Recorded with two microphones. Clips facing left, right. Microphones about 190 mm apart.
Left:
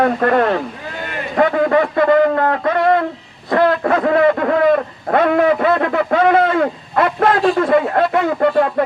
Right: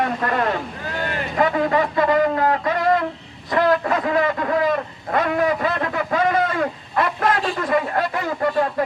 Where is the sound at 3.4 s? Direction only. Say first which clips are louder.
Left 4 dB; 55° left (ahead or behind).